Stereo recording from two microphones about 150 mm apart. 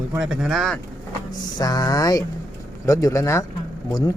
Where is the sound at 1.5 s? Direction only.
25° left (ahead or behind).